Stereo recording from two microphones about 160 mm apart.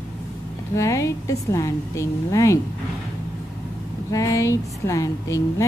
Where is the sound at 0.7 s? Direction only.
20° left (ahead or behind).